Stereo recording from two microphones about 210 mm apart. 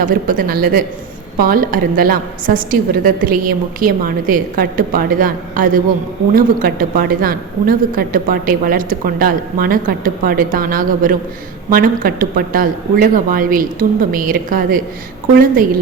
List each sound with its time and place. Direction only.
0.0 s a woman's voice: 40° right (ahead or behind)